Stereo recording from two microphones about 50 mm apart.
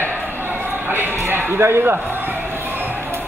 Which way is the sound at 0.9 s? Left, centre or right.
Right.